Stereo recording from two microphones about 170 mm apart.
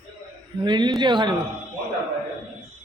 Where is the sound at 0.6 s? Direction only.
25° right (ahead or behind).